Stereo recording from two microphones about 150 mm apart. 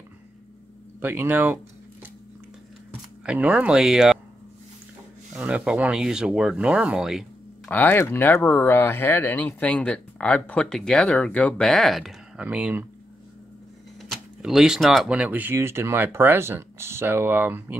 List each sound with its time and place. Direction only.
1.0 s speech: 15° right (ahead or behind)
2.9 s speech: 10° right (ahead or behind)
5.3 s speech: 10° right (ahead or behind)
7.6 s speech: 10° left (ahead or behind); by 12.8 s 10° right (ahead or behind)
14.0 s speech: centre (ahead or behind)